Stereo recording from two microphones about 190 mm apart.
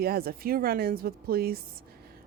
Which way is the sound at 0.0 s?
55° right (ahead or behind).